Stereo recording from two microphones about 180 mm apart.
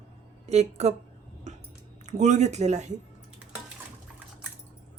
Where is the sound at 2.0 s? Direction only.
40° right (ahead or behind).